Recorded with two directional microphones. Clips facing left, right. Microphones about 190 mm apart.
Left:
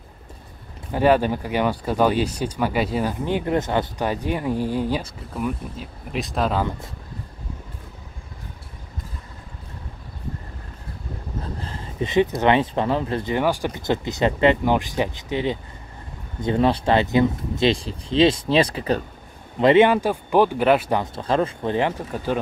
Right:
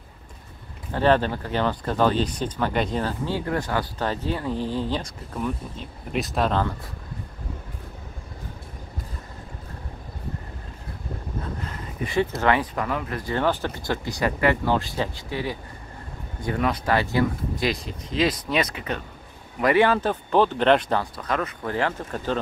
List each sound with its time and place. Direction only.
0.9 s speech: 10° left (ahead or behind)
11.4 s speech: 30° left (ahead or behind)
13.3 s speech: 10° left (ahead or behind); by 19.0 s 35° left (ahead or behind)
19.6 s speech: 20° left (ahead or behind)
21.0 s speech: 25° left (ahead or behind); by 22.4 s 10° left (ahead or behind)